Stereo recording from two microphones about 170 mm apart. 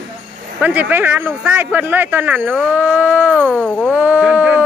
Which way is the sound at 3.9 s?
5° right (ahead or behind).